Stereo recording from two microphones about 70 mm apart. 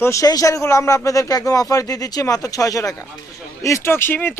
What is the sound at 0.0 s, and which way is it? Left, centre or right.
Speech, left.